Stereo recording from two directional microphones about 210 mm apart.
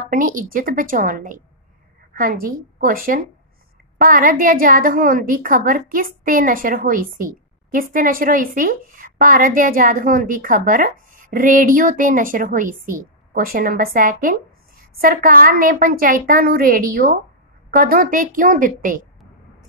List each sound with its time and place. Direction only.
0.1 s a woman's voice: 40° right (ahead or behind)